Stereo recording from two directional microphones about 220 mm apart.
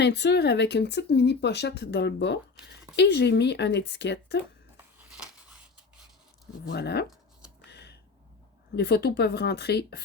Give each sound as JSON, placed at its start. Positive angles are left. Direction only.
{"t": 0.0, "sound": "speech", "side_deg": 50}
{"t": 6.7, "sound": "speech", "side_deg": 50}
{"t": 7.7, "sound": "a sound", "side_deg": 50}
{"t": 8.7, "sound": "speech", "side_deg": 50}